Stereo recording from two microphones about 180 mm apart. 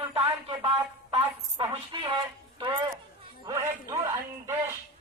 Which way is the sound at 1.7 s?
25° right (ahead or behind).